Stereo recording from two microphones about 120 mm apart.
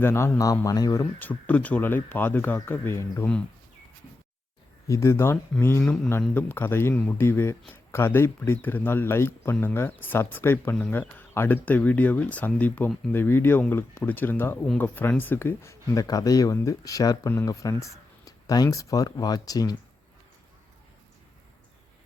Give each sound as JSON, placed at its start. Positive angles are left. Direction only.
{"t": 0.0, "sound": "speech", "side_deg": 20}
{"t": 1.2, "sound": "speech", "side_deg": 15}
{"t": 4.9, "sound": "speech", "side_deg": 25}
{"t": 5.8, "sound": "speech", "side_deg": 5}
{"t": 6.1, "sound": "speech", "side_deg": 15}